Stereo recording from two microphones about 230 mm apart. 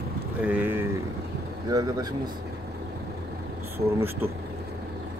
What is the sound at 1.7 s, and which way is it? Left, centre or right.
Speech, centre.